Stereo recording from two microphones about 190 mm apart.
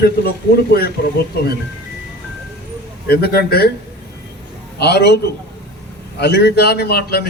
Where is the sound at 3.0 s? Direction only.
55° left (ahead or behind).